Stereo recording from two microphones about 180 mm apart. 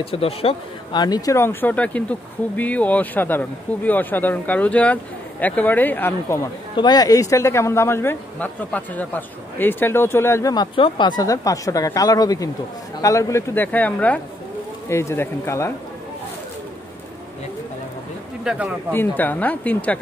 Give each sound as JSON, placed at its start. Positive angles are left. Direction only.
{"t": 0.0, "sound": "speech", "side_deg": 30}
{"t": 18.4, "sound": "speech", "side_deg": -5}
{"t": 18.9, "sound": "speech", "side_deg": 10}